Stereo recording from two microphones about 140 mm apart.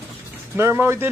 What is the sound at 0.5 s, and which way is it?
Speech, 15° right (ahead or behind).